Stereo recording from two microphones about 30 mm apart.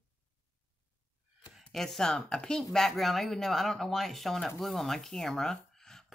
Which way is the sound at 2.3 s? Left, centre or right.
Left.